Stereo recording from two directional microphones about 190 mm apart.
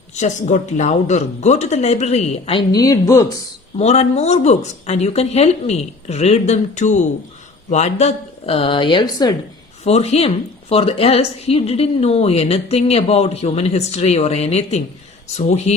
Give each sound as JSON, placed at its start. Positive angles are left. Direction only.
{"t": 0.1, "sound": "a woman's voice", "side_deg": 40}
{"t": 3.8, "sound": "a woman's voice", "side_deg": 35}
{"t": 9.8, "sound": "a woman's voice", "side_deg": 35}